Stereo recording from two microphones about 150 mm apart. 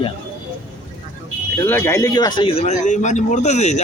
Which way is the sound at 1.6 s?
15° left (ahead or behind).